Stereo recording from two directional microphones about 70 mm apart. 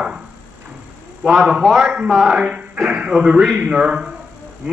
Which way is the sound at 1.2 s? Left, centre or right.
Centre.